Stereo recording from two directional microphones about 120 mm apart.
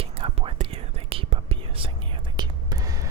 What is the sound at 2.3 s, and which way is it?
Whispering, 35° right (ahead or behind).